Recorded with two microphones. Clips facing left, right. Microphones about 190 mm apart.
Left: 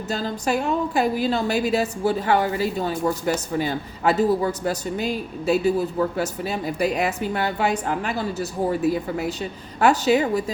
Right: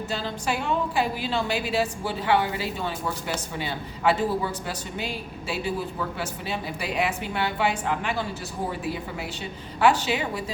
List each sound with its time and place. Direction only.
0.1 s a woman's voice: 45° left (ahead or behind)